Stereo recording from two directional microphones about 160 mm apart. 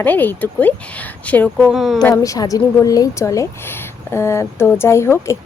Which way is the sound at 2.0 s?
20° left (ahead or behind).